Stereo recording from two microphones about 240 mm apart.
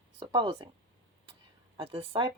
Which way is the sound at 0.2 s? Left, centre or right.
Centre.